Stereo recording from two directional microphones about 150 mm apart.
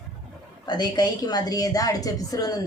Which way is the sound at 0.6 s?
30° left (ahead or behind).